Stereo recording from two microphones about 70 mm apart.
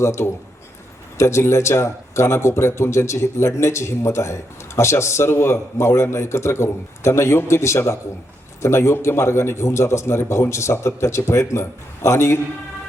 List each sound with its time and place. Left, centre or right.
0.0 s a man's voice: left